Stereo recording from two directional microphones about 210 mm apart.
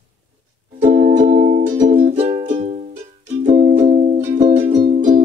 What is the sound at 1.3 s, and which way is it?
Music, 35° right (ahead or behind).